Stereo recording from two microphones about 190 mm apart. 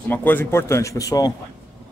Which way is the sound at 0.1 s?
10° left (ahead or behind).